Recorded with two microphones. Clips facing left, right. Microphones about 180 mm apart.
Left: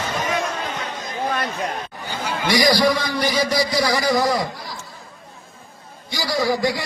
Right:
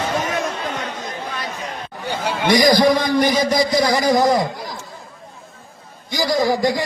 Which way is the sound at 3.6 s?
20° right (ahead or behind).